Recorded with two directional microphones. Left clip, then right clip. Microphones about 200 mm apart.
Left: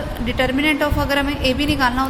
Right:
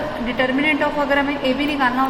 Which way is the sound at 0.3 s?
35° left (ahead or behind).